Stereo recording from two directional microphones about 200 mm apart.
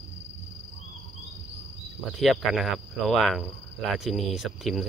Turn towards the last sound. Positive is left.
turn(degrees=0)  # may be behind; listen again after turning